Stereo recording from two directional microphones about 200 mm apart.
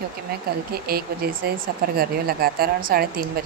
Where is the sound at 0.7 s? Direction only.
50° right (ahead or behind).